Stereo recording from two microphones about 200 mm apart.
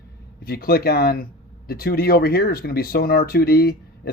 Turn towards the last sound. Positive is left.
turn(degrees=50)  # may be behind; listen again after turning